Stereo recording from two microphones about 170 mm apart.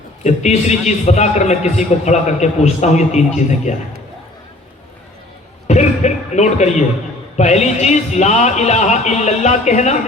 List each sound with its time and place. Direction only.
0.3 s a man's voice: 40° left (ahead or behind)
5.6 s a man's voice: 45° left (ahead or behind)